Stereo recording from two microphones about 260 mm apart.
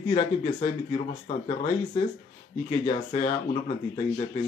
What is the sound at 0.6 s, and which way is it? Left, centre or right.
Speech, left.